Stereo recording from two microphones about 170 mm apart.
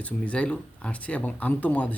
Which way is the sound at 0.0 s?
5° left (ahead or behind).